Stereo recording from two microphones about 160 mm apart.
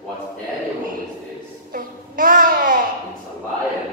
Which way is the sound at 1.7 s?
60° right (ahead or behind).